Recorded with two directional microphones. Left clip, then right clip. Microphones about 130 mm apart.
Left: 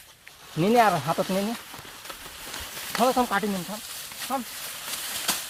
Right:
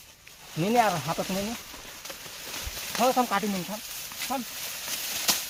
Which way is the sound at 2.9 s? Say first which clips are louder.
Left 1 dB; 75° left (ahead or behind).